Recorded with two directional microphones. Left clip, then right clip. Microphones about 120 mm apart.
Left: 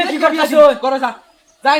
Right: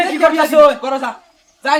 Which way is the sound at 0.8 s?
20° left (ahead or behind).